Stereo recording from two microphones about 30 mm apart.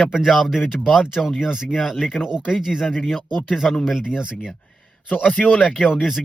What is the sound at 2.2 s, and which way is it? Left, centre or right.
Speech, left.